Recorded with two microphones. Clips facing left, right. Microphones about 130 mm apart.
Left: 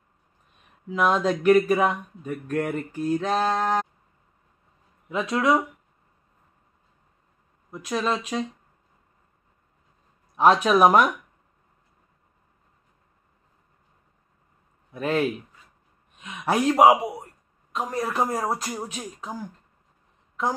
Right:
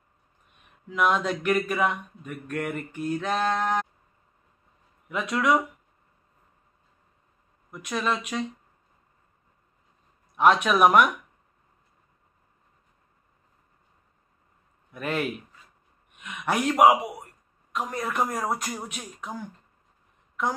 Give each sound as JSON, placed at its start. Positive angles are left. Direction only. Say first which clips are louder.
{"t": 0.8, "sound": "speech", "louder": "left 2 dB", "side_deg": 35}
{"t": 5.1, "sound": "a man's voice", "louder": "left 2 dB", "side_deg": 30}
{"t": 7.7, "sound": "speech", "louder": "left 2 dB", "side_deg": 30}
{"t": 10.3, "sound": "speech", "louder": "left 2 dB", "side_deg": 35}
{"t": 14.9, "sound": "a man's voice", "louder": "left 5 dB", "side_deg": 30}